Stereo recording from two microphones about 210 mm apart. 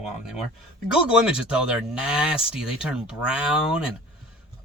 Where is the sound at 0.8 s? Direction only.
5° right (ahead or behind).